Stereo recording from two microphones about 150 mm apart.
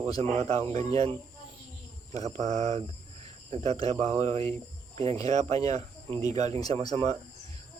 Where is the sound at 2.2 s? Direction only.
50° right (ahead or behind).